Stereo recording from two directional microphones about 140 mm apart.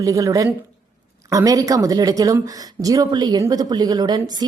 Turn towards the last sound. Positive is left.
turn(degrees=-30)  # may be behind; listen again after turning